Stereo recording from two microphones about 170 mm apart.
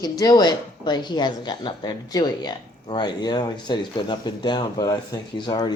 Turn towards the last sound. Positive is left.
turn(degrees=25)  # may be behind; listen again after turning